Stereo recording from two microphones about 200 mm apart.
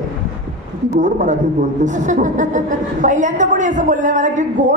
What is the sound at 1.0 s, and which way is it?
A woman's voice, 40° right (ahead or behind).